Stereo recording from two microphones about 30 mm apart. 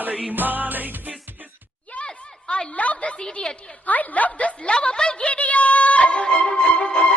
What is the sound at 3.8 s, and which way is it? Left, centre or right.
Speech, left.